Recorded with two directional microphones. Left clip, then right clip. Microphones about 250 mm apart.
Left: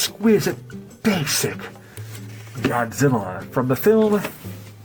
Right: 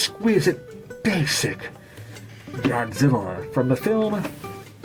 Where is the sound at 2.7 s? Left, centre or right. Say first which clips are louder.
Left 2 dB; left.